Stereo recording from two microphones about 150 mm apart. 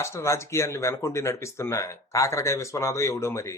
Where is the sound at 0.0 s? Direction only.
20° left (ahead or behind).